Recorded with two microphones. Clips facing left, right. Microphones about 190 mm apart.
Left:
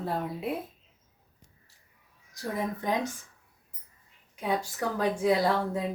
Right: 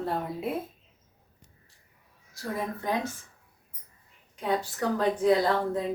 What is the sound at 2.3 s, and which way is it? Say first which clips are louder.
Speech: left 1 dB; 15° left (ahead or behind).